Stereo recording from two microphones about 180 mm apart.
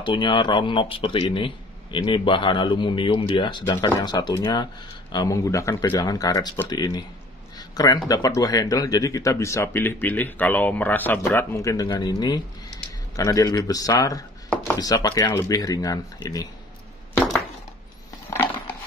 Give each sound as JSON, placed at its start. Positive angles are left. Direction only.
{"t": 0.0, "sound": "speech", "side_deg": 25}
{"t": 7.5, "sound": "a sound", "side_deg": 20}
{"t": 8.1, "sound": "speech", "side_deg": 20}